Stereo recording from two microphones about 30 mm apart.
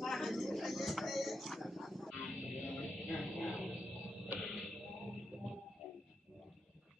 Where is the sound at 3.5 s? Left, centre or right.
Right.